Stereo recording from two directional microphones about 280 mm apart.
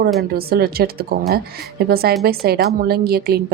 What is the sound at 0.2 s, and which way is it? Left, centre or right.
Speech, right.